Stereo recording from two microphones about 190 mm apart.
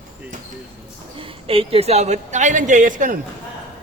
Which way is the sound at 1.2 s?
30° right (ahead or behind).